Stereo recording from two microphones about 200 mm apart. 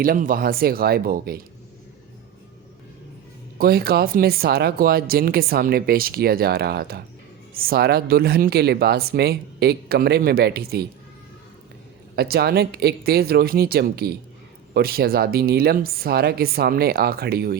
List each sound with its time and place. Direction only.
0.0 s speech: 45° right (ahead or behind)
3.6 s speech: 50° right (ahead or behind)
12.1 s speech: 50° right (ahead or behind)